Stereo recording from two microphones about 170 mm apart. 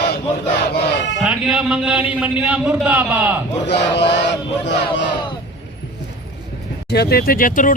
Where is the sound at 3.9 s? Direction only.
90° left.